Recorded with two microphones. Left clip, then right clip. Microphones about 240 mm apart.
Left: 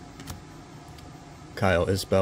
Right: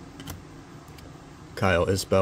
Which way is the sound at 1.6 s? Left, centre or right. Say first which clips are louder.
Right 1 dB; centre.